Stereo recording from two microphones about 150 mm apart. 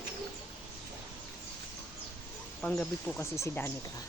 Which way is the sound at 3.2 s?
20° left (ahead or behind).